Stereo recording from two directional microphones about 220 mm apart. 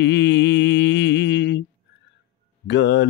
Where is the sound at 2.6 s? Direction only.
55° left (ahead or behind).